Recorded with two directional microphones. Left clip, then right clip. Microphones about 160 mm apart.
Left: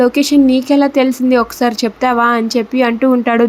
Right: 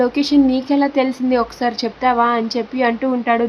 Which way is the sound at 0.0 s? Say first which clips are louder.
Left 4 dB; 30° left (ahead or behind).